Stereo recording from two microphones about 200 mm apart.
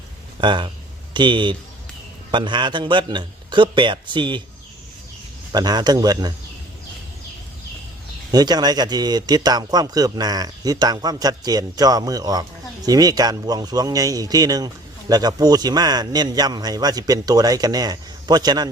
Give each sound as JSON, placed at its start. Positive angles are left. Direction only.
{"t": 0.4, "sound": "speech", "side_deg": -25}
{"t": 5.5, "sound": "speech", "side_deg": -20}
{"t": 8.3, "sound": "speech", "side_deg": -20}